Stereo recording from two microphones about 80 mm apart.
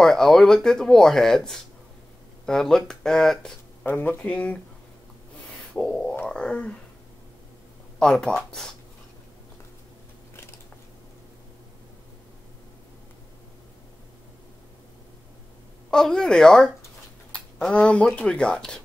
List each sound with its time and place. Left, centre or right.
0.0 s speech: centre
3.8 s speech: left
5.8 s speech: centre
8.0 s speech: centre
15.9 s speech: centre